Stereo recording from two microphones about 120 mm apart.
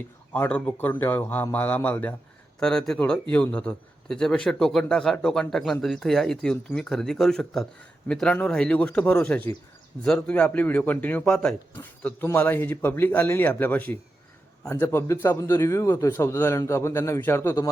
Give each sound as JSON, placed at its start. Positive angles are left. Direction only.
{"t": 0.3, "sound": "a man's voice", "side_deg": 10}
{"t": 11.8, "sound": "a man's voice", "side_deg": 15}